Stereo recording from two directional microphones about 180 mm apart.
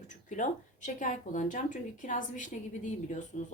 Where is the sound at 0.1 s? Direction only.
45° left (ahead or behind).